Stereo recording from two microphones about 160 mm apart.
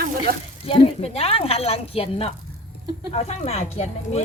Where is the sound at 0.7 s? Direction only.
35° left (ahead or behind).